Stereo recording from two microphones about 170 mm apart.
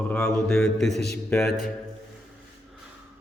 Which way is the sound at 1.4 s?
60° left (ahead or behind).